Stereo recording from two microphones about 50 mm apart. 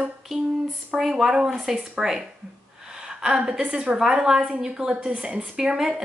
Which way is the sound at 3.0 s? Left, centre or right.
Centre.